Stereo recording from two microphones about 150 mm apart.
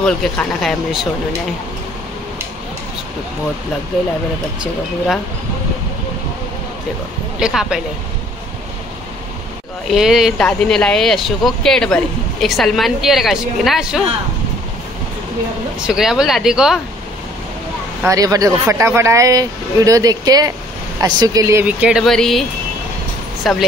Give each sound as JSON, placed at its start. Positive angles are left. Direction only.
{"t": 0.0, "sound": "speech", "side_deg": 5}
{"t": 7.3, "sound": "speech", "side_deg": -5}
{"t": 9.8, "sound": "speech", "side_deg": -5}
{"t": 15.8, "sound": "speech", "side_deg": -5}
{"t": 18.0, "sound": "speech", "side_deg": -25}
{"t": 21.6, "sound": "speech", "side_deg": -5}
{"t": 23.5, "sound": "speech", "side_deg": 0}